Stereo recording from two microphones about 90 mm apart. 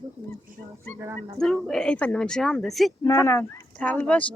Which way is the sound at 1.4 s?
5° left (ahead or behind).